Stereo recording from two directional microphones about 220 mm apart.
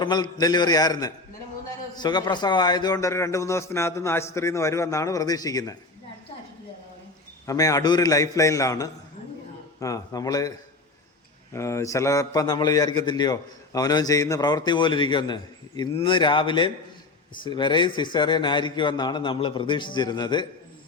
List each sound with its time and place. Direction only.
0.0 s a man's voice: 20° left (ahead or behind)
7.4 s a man's voice: 15° left (ahead or behind)
11.5 s a man's voice: 15° left (ahead or behind)